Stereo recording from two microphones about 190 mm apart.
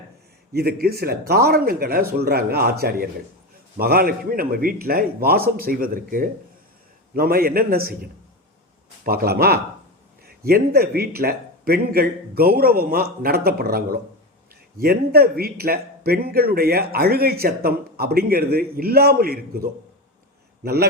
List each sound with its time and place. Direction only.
0.5 s a man's voice: 55° right (ahead or behind)
9.0 s a man's voice: 55° right (ahead or behind)